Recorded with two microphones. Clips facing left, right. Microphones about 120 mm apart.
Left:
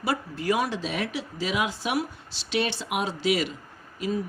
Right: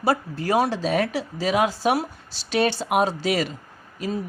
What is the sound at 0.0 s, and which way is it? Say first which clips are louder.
Speech: right 5 dB; 35° right (ahead or behind).